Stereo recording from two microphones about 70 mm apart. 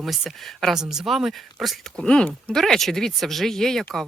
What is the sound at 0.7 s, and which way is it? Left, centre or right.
Speech, centre.